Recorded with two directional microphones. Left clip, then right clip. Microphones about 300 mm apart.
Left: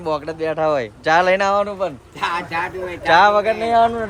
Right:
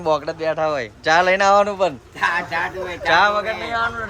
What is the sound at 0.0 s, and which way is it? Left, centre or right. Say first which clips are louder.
Speech: right 2 dB; centre.